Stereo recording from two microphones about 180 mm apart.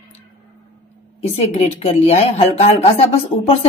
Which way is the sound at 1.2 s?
35° left (ahead or behind).